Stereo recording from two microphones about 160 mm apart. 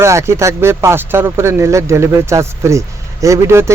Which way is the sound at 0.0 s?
15° right (ahead or behind).